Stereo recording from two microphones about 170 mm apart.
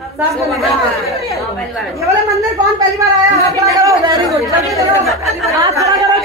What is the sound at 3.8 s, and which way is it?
Speech, 20° right (ahead or behind).